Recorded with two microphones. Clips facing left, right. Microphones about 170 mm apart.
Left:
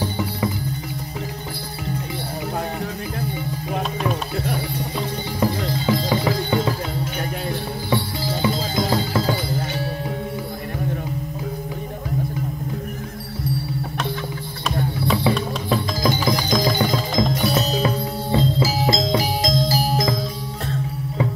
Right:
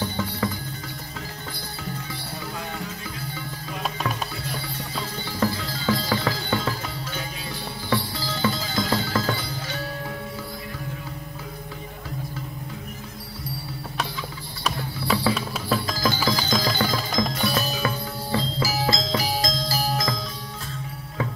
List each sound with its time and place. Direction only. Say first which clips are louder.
5.4 s music: left 4 dB; 20° left (ahead or behind)
7.9 s music: left 3 dB; 20° left (ahead or behind)
15.3 s music: left 3 dB; 15° left (ahead or behind)